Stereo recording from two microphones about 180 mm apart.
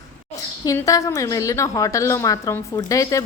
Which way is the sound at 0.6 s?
20° left (ahead or behind).